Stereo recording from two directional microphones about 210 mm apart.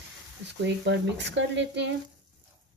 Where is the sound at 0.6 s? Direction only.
55° right (ahead or behind).